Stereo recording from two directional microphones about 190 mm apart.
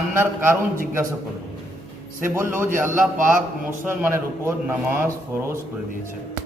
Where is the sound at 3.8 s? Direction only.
10° right (ahead or behind).